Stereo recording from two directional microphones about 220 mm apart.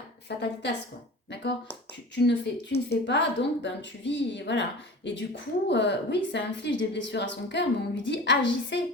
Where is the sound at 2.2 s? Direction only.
50° left (ahead or behind).